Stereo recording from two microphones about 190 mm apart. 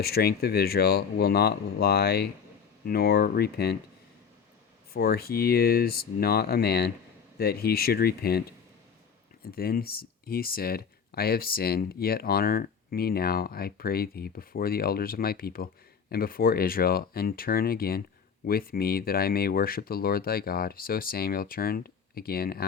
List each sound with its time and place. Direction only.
0.0 s speech: 55° left (ahead or behind)
4.9 s speech: 55° left (ahead or behind)